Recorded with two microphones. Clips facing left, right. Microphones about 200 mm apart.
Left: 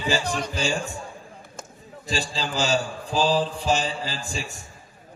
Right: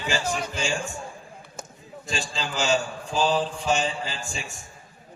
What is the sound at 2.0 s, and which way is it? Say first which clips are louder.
A man's voice: left 3 dB; 35° left (ahead or behind).